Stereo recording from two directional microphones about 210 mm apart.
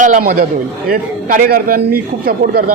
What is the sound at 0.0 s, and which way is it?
A man's voice, 40° right (ahead or behind).